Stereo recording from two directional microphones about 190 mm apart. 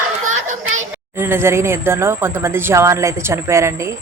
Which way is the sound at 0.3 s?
40° right (ahead or behind).